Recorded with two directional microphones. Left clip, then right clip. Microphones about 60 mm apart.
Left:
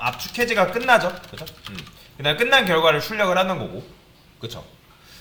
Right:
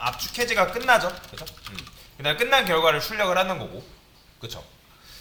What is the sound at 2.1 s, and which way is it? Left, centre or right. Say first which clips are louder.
Speech: left 3 dB; right.